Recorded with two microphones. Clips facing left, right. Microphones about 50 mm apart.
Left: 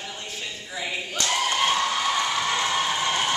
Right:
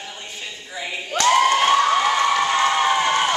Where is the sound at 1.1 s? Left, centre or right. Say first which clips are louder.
Right 11 dB; right.